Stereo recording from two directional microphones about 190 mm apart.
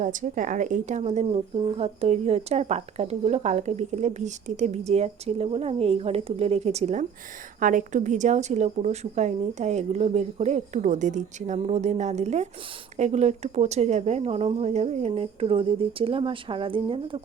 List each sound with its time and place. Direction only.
0.0 s speech: 45° right (ahead or behind)